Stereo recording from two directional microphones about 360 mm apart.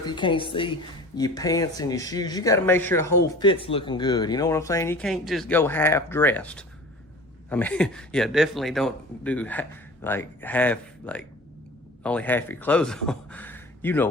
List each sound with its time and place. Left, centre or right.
0.0 s a woman's voice: centre